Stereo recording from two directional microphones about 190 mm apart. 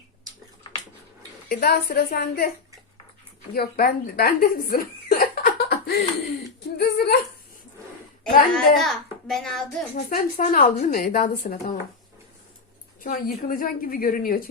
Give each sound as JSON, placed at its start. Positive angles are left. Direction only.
{"t": 1.5, "sound": "a woman's voice", "side_deg": 55}
{"t": 3.5, "sound": "speech", "side_deg": 55}
{"t": 6.7, "sound": "a sound", "side_deg": 60}
{"t": 8.5, "sound": "a child's voice", "side_deg": 0}
{"t": 9.9, "sound": "a woman's voice", "side_deg": 50}
{"t": 13.0, "sound": "a woman's voice", "side_deg": 45}